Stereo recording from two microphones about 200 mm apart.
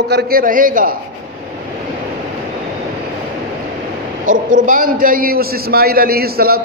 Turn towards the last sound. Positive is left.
turn(degrees=-50)  # may be behind; listen again after turning